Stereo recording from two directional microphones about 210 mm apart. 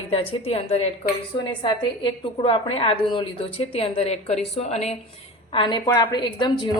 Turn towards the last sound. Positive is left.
turn(degrees=20)  # may be behind; listen again after turning